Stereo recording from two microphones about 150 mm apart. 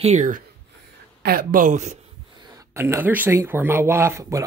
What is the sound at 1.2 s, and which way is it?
Speech, 75° right (ahead or behind).